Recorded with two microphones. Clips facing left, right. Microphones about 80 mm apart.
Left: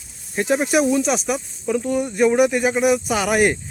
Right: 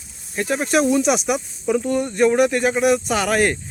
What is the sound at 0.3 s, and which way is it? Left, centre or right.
Speech, centre.